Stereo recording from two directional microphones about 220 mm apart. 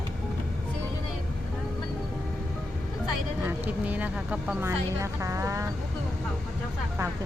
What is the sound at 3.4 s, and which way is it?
Speech, 5° right (ahead or behind).